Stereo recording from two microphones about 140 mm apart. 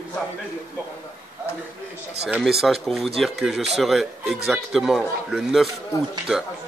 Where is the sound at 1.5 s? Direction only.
20° left (ahead or behind).